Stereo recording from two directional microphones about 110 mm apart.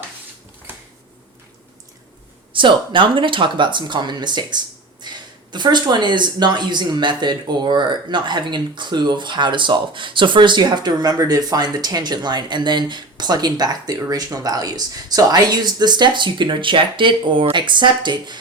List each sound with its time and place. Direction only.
2.5 s speech: 50° right (ahead or behind)